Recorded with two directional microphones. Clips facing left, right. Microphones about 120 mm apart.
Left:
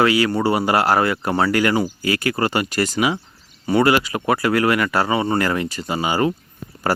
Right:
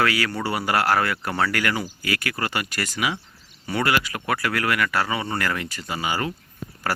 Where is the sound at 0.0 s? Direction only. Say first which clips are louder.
Left 7 dB; 20° left (ahead or behind).